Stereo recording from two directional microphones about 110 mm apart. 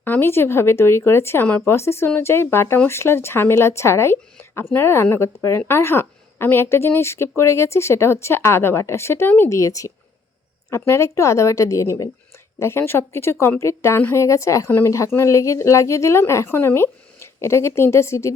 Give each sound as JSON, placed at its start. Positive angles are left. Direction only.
{"t": 0.0, "sound": "speech", "side_deg": 20}